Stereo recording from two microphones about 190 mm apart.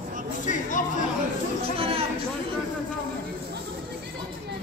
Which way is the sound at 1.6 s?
30° right (ahead or behind).